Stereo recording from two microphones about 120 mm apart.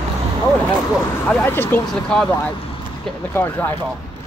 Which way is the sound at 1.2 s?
15° left (ahead or behind).